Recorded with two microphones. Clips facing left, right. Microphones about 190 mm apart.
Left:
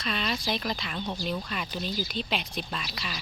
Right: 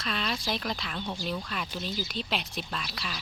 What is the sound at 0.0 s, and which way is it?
Speech, centre (ahead or behind).